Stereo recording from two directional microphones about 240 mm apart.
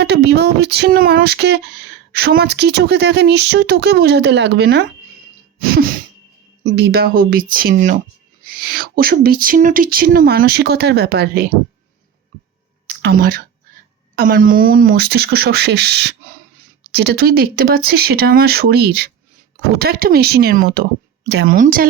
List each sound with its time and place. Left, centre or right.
0.0 s a sound: right
5.5 s throat clearing: right
6.7 s speech: right
13.0 s speech: right